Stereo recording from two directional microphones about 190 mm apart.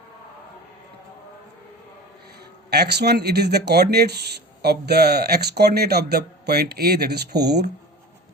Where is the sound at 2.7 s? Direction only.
60° right (ahead or behind).